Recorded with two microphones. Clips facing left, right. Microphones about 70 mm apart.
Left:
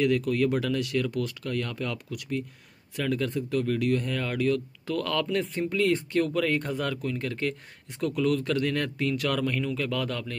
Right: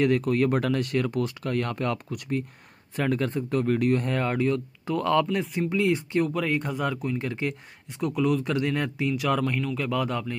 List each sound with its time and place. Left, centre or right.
0.0 s speech: right
5.2 s speech: centre